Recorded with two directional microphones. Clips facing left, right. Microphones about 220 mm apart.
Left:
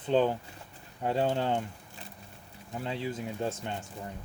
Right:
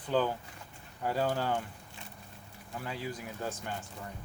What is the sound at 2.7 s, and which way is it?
Speech, 25° left (ahead or behind).